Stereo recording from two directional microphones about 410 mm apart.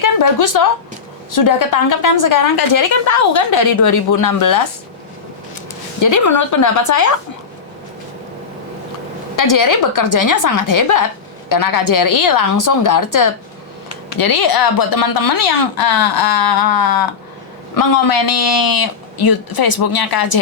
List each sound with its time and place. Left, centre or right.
0.0 s a woman's voice: left
6.0 s a woman's voice: left
9.3 s a woman's voice: left